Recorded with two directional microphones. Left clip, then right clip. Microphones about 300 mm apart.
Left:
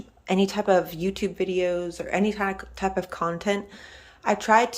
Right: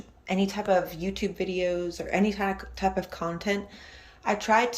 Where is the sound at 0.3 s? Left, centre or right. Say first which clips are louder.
Left 4 dB; centre.